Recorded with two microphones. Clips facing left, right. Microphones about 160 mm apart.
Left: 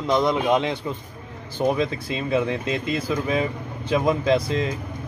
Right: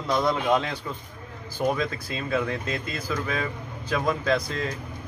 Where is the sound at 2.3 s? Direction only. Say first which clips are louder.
Left 4 dB; 25° left (ahead or behind).